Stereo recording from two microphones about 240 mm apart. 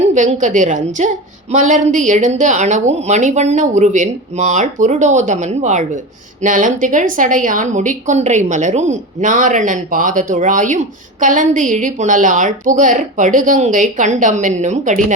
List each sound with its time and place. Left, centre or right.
0.0 s a woman's voice: right